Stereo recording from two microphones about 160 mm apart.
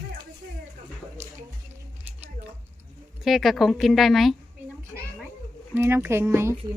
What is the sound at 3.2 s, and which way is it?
Speech, centre (ahead or behind).